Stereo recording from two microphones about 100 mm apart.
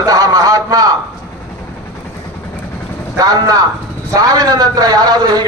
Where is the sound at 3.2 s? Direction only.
40° right (ahead or behind).